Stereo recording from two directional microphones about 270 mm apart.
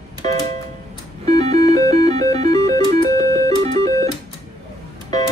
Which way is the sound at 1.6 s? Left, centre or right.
Centre.